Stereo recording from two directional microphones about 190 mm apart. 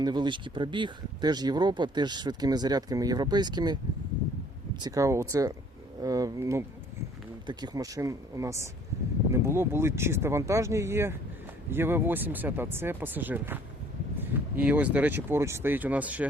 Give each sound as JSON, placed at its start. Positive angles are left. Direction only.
{"t": 0.0, "sound": "speech", "side_deg": -20}
{"t": 4.8, "sound": "speech", "side_deg": -15}